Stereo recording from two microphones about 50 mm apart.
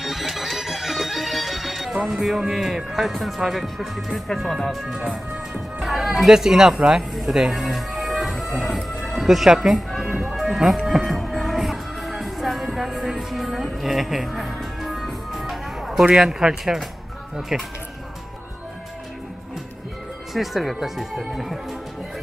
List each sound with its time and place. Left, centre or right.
0.0 s music: centre
2.5 s speech: centre
7.5 s music: centre
9.5 s speech: centre
9.8 s music: centre
16.2 s speech: centre
20.3 s speech: centre